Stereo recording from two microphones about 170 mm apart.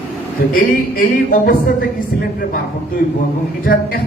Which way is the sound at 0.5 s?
55° left (ahead or behind).